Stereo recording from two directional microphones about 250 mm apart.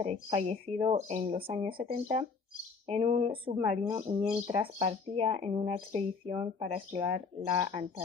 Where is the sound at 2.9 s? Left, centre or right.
Right.